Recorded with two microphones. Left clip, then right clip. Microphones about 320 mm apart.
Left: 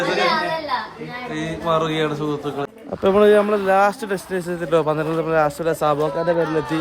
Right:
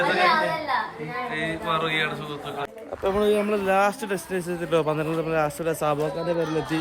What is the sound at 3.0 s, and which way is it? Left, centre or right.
Speech, left.